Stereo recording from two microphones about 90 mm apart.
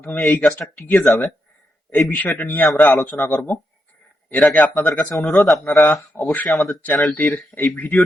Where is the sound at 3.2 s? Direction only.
25° left (ahead or behind).